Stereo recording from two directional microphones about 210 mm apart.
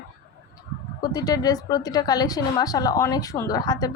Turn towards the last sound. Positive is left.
turn(degrees=20)  # may be behind; listen again after turning